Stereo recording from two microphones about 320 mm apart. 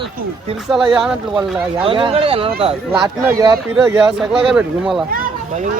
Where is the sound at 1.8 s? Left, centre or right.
Centre.